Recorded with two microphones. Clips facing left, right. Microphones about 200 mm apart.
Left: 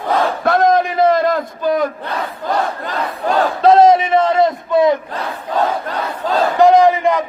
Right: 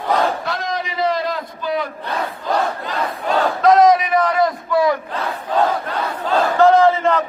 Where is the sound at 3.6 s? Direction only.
30° left (ahead or behind).